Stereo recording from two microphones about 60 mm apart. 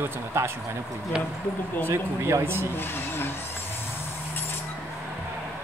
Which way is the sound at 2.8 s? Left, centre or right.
Left.